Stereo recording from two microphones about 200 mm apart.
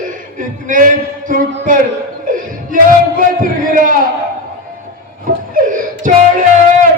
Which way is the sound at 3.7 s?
40° right (ahead or behind).